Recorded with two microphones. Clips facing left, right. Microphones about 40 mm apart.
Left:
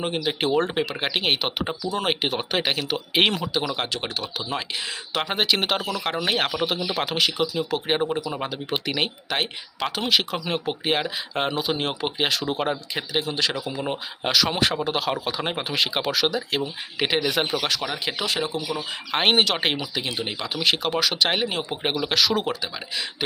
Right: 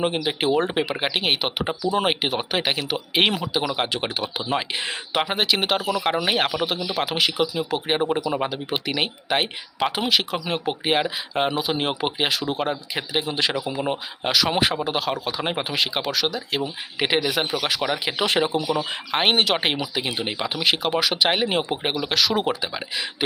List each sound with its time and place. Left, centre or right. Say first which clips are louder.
0.0 s speech: right 2 dB; centre
8.1 s speech: right 4 dB; centre
13.0 s speech: right 2 dB; centre
17.7 s speech: right 3 dB; centre
18.3 s speech: right 7 dB; right
19.1 s speech: even; centre
21.4 s speech: right 4 dB; right
21.8 s speech: left 4 dB; centre
22.4 s speech: right 3 dB; centre